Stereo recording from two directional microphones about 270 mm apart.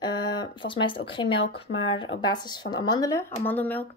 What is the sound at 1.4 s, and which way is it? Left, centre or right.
Speech, left.